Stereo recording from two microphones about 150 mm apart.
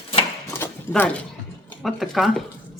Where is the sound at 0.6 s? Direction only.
15° left (ahead or behind).